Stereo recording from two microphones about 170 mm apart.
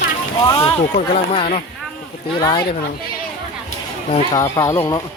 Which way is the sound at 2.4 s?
30° left (ahead or behind).